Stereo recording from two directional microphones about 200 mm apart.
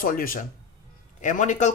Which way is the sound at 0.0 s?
45° left (ahead or behind).